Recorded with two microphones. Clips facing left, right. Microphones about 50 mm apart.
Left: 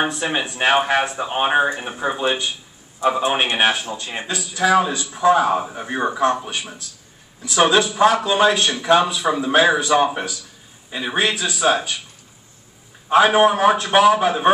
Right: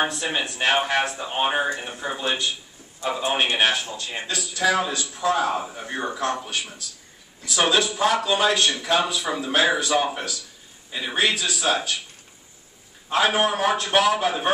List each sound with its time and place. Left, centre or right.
0.0 s a man's voice: centre
4.3 s a man's voice: centre
13.1 s a man's voice: centre